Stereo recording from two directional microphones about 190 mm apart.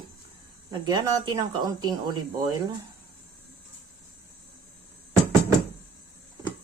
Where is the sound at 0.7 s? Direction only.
20° right (ahead or behind).